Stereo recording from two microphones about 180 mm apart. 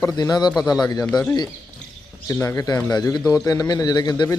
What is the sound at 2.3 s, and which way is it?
A man's voice, 15° left (ahead or behind).